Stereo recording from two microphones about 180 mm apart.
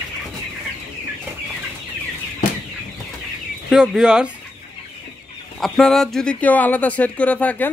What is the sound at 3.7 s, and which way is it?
Speech, 5° right (ahead or behind).